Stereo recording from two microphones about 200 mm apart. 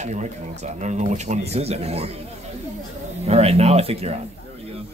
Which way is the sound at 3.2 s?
30° right (ahead or behind).